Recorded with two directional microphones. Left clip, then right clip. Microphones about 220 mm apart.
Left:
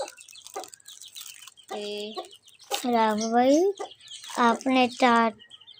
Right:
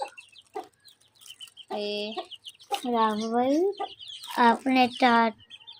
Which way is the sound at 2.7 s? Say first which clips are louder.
Left 2 dB; 20° left (ahead or behind).